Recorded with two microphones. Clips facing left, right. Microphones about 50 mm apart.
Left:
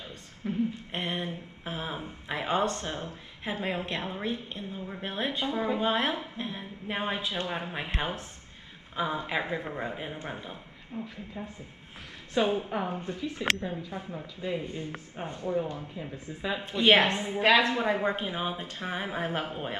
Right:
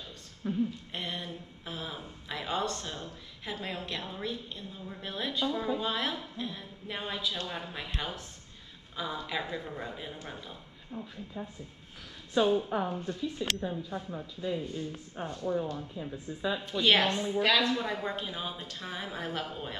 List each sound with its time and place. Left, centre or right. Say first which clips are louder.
0.5 s speech: left 1 dB; left
12.8 s speech: even; left